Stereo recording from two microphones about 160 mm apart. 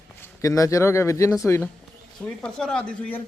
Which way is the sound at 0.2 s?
20° left (ahead or behind).